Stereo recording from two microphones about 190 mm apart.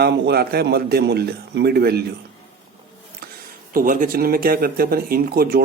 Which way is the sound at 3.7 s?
45° right (ahead or behind).